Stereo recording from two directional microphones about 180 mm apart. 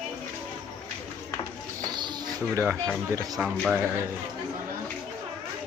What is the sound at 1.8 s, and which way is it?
Music, 20° right (ahead or behind).